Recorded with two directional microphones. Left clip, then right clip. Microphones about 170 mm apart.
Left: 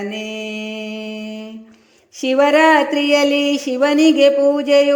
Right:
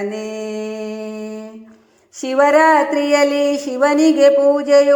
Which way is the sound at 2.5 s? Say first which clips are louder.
Right 1 dB; 30° left (ahead or behind).